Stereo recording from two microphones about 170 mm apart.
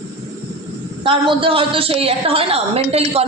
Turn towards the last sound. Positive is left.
turn(degrees=-35)  # may be behind; listen again after turning